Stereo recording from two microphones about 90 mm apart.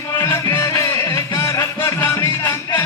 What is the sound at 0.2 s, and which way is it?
Music, 30° left (ahead or behind).